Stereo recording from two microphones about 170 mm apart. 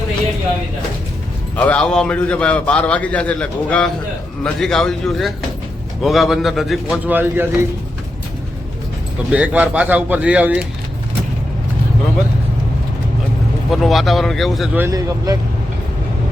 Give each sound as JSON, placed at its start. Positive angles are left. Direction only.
{"t": 1.5, "sound": "a man's voice", "side_deg": 10}
{"t": 9.3, "sound": "speech", "side_deg": -10}
{"t": 13.7, "sound": "a man's voice", "side_deg": 0}
{"t": 14.8, "sound": "speech", "side_deg": -20}